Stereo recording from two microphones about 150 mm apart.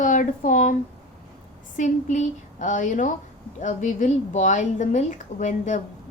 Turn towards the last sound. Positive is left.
turn(degrees=55)  # may be behind; listen again after turning